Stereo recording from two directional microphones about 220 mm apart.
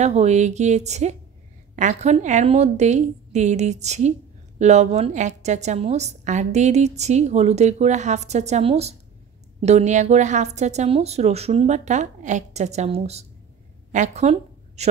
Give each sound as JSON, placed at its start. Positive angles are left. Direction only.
{"t": 0.0, "sound": "a woman's voice", "side_deg": -30}